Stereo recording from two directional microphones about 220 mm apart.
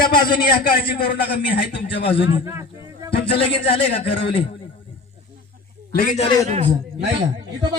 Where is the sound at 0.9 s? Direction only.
45° left (ahead or behind).